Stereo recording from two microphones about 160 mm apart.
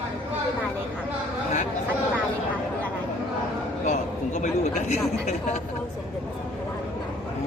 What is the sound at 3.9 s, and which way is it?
A man's voice, 50° left (ahead or behind).